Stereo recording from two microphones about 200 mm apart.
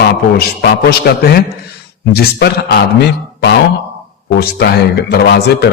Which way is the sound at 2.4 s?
55° left (ahead or behind).